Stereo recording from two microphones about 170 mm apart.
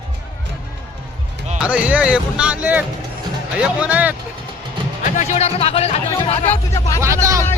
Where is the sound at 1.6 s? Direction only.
10° right (ahead or behind).